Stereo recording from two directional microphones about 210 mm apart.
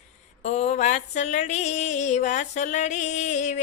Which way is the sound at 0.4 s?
30° left (ahead or behind).